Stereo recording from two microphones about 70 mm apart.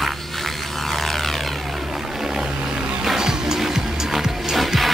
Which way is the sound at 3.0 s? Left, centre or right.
Centre.